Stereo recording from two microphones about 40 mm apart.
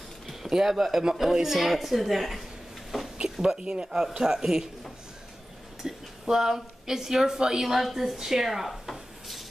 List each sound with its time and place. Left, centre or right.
0.3 s a woman's voice: centre
2.9 s a sound: centre
3.5 s speech: right
5.8 s speech: centre
7.6 s speech: centre